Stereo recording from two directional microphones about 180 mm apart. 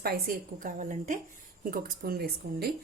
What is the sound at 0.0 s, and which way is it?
A woman's voice, 55° right (ahead or behind).